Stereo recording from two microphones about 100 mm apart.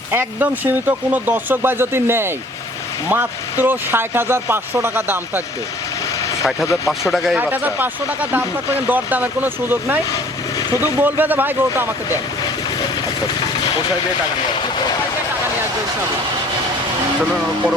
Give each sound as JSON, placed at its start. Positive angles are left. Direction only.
{"t": 0.1, "sound": "speech", "side_deg": -20}
{"t": 6.7, "sound": "speech", "side_deg": 30}
{"t": 7.5, "sound": "speech", "side_deg": -15}
{"t": 10.7, "sound": "speech", "side_deg": 40}
{"t": 11.0, "sound": "speech", "side_deg": -20}